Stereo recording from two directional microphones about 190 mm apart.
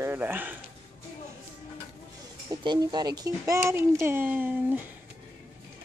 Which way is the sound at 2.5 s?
20° right (ahead or behind).